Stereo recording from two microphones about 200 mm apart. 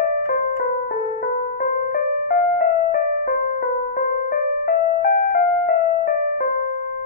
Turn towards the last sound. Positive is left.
turn(degrees=45)  # may be behind; listen again after turning